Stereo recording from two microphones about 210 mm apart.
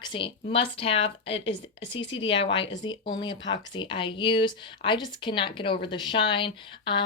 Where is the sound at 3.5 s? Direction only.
25° left (ahead or behind).